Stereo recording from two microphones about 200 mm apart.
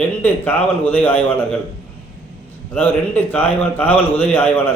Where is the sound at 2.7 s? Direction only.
10° left (ahead or behind).